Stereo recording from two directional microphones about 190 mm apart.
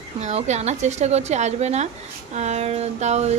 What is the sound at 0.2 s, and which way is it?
A woman's voice, 35° right (ahead or behind).